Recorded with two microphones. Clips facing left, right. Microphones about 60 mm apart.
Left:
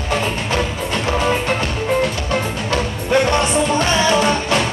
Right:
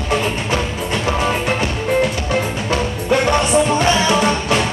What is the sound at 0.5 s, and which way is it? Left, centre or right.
Music, centre.